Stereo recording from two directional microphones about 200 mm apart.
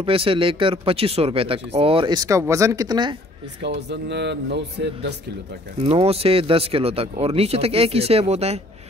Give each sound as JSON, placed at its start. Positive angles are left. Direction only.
{"t": 0.0, "sound": "speech", "side_deg": -25}
{"t": 3.6, "sound": "speech", "side_deg": -60}
{"t": 5.9, "sound": "speech", "side_deg": -30}